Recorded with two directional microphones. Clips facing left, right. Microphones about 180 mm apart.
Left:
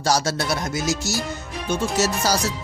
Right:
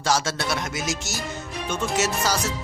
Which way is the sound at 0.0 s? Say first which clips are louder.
Left 2 dB; 35° left (ahead or behind).